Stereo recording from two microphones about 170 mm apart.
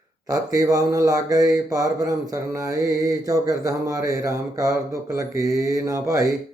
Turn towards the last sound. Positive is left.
turn(degrees=-20)  # may be behind; listen again after turning